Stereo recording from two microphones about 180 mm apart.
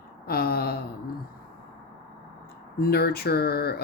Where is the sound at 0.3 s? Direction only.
55° left (ahead or behind).